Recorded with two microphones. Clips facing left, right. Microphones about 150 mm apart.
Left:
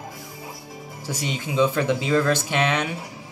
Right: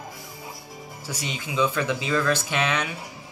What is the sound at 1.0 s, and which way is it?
Speech, 25° left (ahead or behind).